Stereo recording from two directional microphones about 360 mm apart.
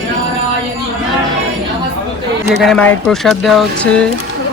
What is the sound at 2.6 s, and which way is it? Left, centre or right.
Speech, centre.